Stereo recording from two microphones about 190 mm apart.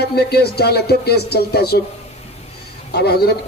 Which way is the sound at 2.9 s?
55° left (ahead or behind).